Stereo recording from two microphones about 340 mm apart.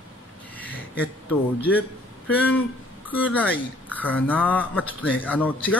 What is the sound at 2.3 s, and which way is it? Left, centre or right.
Speech, centre.